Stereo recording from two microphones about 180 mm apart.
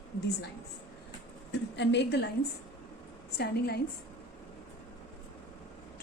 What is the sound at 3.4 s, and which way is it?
Speech, 65° left (ahead or behind).